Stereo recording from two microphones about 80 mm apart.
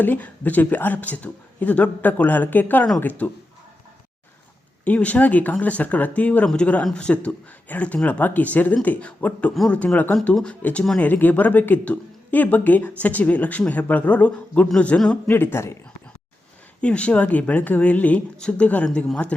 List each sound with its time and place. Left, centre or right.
0.0 s speech: left
4.9 s speech: centre
15.3 s speech: left
16.8 s speech: centre